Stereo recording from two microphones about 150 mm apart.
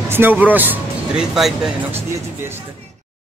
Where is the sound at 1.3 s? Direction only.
Centre (ahead or behind).